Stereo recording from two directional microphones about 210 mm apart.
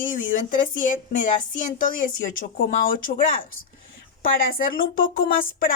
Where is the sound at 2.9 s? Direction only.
40° left (ahead or behind).